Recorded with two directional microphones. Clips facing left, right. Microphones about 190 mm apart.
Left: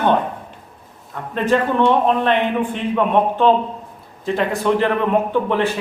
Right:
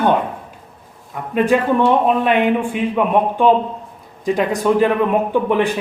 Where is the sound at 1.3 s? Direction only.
10° right (ahead or behind).